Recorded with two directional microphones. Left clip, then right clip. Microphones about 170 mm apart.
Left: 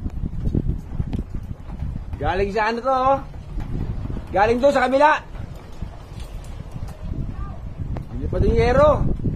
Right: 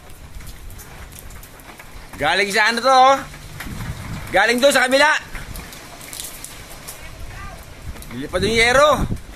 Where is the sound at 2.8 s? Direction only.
30° right (ahead or behind).